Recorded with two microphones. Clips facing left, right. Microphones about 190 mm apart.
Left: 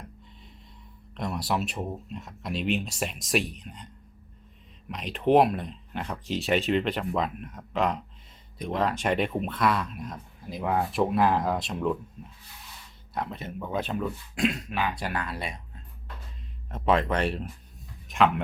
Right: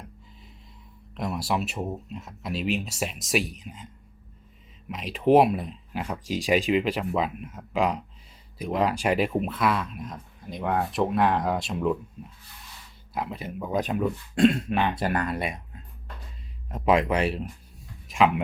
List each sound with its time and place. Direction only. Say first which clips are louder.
1.1 s speech: right 1 dB; centre (ahead or behind)
4.9 s speech: right 2 dB; centre (ahead or behind)
14.7 s speech: right 5 dB; centre (ahead or behind)
15.1 s speech: right 5 dB; 50° right (ahead or behind)
16.7 s speech: right 2 dB; 5° right (ahead or behind)